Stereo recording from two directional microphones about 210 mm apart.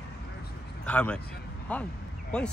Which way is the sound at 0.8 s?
5° left (ahead or behind).